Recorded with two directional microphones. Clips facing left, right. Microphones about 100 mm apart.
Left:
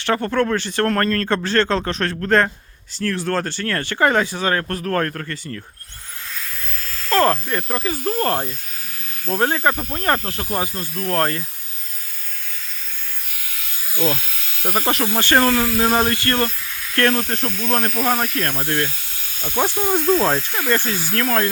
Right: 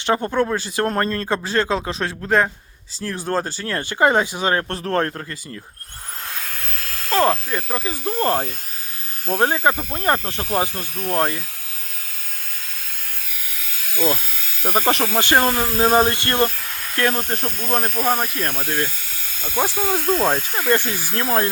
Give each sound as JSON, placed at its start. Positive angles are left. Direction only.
{"t": 0.0, "sound": "speech", "side_deg": -15}
{"t": 6.3, "sound": "hiss", "side_deg": -60}
{"t": 7.1, "sound": "speech", "side_deg": -10}
{"t": 9.9, "sound": "speech", "side_deg": -10}
{"t": 10.2, "sound": "speech", "side_deg": -25}
{"t": 14.6, "sound": "speech", "side_deg": -15}
{"t": 14.8, "sound": "speech", "side_deg": -30}
{"t": 15.7, "sound": "speech", "side_deg": -30}
{"t": 16.9, "sound": "speech", "side_deg": -15}
{"t": 17.4, "sound": "speech", "side_deg": -45}
{"t": 17.7, "sound": "speech", "side_deg": -10}
{"t": 20.0, "sound": "speech", "side_deg": -50}
{"t": 20.6, "sound": "speech", "side_deg": -15}